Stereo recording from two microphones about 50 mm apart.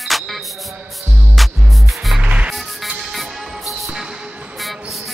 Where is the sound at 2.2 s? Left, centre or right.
Right.